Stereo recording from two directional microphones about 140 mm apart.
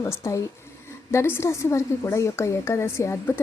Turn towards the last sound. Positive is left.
turn(degrees=20)  # may be behind; listen again after turning